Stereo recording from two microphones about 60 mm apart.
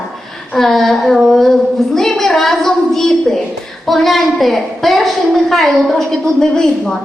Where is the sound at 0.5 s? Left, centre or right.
Centre.